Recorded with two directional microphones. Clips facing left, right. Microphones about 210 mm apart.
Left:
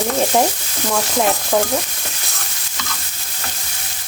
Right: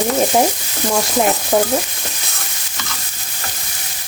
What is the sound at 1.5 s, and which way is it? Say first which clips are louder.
Stir: right 2 dB; 20° right (ahead or behind).